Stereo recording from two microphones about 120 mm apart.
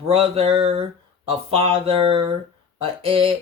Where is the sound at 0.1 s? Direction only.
50° right (ahead or behind).